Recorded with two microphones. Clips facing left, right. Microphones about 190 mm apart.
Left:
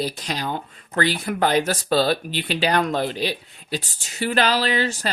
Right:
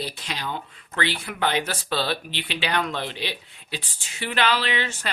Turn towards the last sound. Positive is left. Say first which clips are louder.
# left 5 dB
turn(degrees=40)  # may be behind; listen again after turning